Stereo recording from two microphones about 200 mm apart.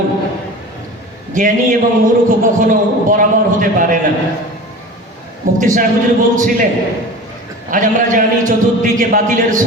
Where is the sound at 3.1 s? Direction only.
40° right (ahead or behind).